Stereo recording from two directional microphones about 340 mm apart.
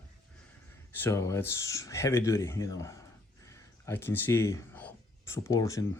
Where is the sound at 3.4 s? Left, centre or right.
Centre.